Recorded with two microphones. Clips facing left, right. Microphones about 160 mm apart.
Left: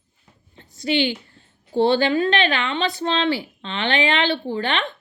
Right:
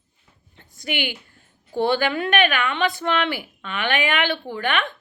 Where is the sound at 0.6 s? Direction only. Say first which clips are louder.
Left 4 dB; 50° right (ahead or behind).